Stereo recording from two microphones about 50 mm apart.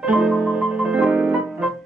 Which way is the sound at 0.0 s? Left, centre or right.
Right.